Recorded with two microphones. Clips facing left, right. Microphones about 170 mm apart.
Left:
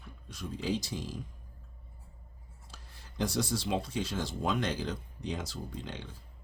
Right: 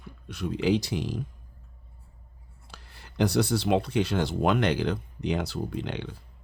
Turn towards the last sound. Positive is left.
turn(degrees=-70)  # may be behind; listen again after turning